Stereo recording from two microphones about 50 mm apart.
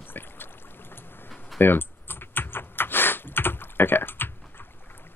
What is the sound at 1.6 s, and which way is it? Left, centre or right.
Typing, left.